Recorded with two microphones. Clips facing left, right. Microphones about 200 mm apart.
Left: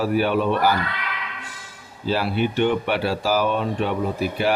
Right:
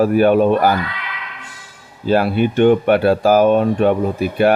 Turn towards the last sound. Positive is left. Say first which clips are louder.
# right 7 dB
turn(degrees=-55)  # may be behind; listen again after turning